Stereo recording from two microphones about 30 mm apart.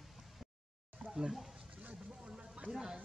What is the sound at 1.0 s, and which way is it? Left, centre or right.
Speech, centre.